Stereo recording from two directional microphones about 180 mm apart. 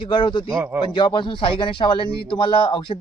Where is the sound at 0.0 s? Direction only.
25° left (ahead or behind).